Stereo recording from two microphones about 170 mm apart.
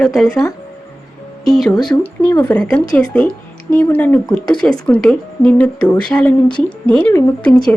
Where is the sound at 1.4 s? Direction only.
Centre (ahead or behind).